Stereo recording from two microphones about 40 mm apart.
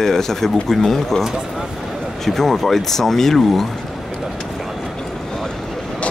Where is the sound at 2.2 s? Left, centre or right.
Centre.